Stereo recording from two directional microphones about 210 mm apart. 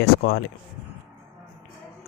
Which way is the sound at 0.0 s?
50° left (ahead or behind).